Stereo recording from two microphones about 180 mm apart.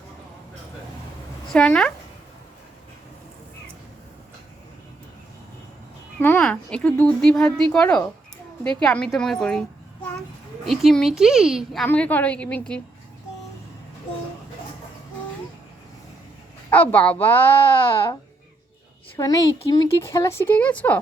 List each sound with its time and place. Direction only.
1.5 s speech: 5° left (ahead or behind)
6.1 s a woman's voice: 10° left (ahead or behind)
16.7 s speech: 10° left (ahead or behind)
17.6 s speech: 30° left (ahead or behind); by 21.0 s 10° left (ahead or behind)